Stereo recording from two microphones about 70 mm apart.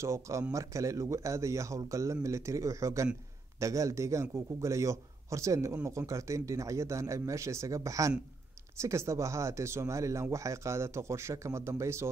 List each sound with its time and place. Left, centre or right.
0.0 s speech: right